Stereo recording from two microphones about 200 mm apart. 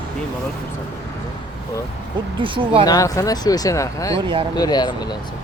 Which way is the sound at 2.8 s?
15° left (ahead or behind).